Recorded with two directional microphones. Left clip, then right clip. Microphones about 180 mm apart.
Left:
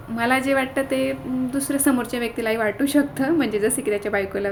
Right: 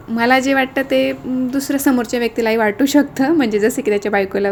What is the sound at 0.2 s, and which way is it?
Speech, 40° right (ahead or behind).